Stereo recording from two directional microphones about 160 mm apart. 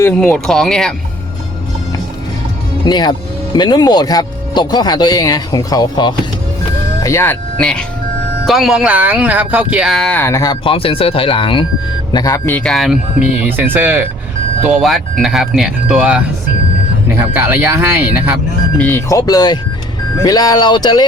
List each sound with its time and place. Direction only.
0.0 s speech: 5° left (ahead or behind)
2.8 s speech: 30° left (ahead or behind)
12.5 s speech: 5° left (ahead or behind); by 14.1 s 10° right (ahead or behind)
14.7 s speech: centre (ahead or behind)
18.8 s speech: 15° left (ahead or behind)